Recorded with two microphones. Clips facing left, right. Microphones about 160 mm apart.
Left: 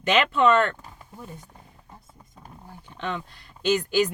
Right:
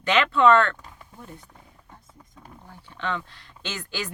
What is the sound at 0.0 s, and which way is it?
Speech, 20° left (ahead or behind).